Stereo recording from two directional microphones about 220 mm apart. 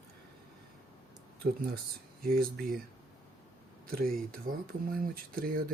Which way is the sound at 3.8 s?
40° right (ahead or behind).